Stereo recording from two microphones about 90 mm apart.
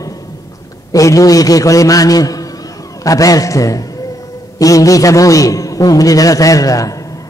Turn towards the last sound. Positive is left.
turn(degrees=40)  # may be behind; listen again after turning